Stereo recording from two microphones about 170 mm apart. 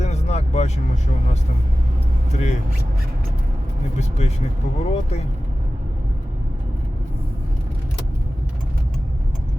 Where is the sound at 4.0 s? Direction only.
40° left (ahead or behind).